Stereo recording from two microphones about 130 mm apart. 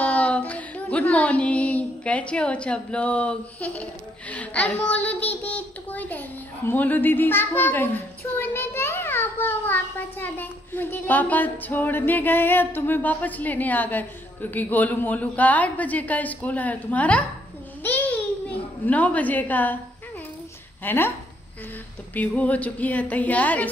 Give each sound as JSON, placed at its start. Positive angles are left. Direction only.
{"t": 0.0, "sound": "child singing", "side_deg": 10}
{"t": 6.7, "sound": "a woman's voice", "side_deg": 15}
{"t": 17.8, "sound": "babbling", "side_deg": 10}
{"t": 20.8, "sound": "a woman's voice", "side_deg": 15}
{"t": 22.1, "sound": "a woman's voice", "side_deg": 10}